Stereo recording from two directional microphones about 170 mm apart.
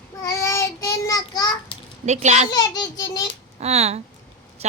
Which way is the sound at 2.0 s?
40° right (ahead or behind).